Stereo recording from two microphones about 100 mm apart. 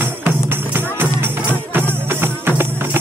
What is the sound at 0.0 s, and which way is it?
Music, 20° right (ahead or behind).